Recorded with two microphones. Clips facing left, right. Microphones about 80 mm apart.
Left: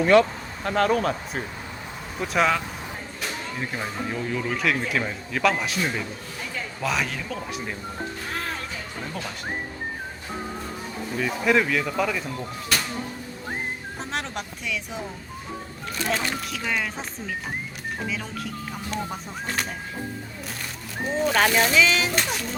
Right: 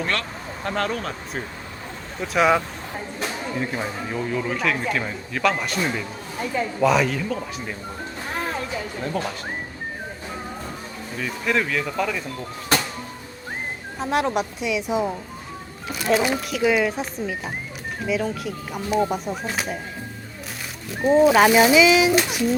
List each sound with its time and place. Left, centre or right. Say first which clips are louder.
0.0 s speech: left 10 dB; centre
0.6 s speech: left 4 dB; centre
3.5 s speech: right 4 dB; centre
11.2 s speech: left 2 dB; centre
14.0 s speech: right 11 dB; centre
21.2 s speech: right 4 dB; centre